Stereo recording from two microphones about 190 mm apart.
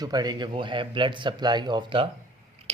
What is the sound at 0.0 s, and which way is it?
Speech, 20° right (ahead or behind).